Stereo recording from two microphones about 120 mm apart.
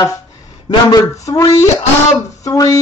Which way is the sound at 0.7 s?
30° left (ahead or behind).